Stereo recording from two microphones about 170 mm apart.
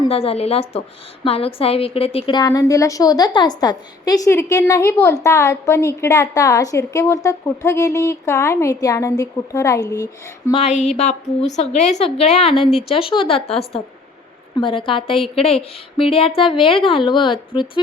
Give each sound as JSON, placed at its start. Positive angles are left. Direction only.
{"t": 0.1, "sound": "a woman's voice", "side_deg": 35}
{"t": 10.5, "sound": "a woman's voice", "side_deg": 40}